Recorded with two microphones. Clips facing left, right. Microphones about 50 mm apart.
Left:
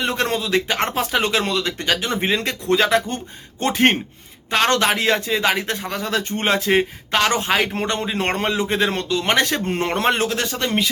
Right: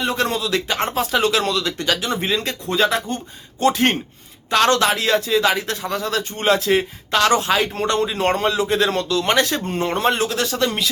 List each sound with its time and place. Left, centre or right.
0.0 s speech: left
0.8 s speech: left
3.6 s speech: left
4.4 s speech: left
8.1 s speech: left
9.2 s speech: left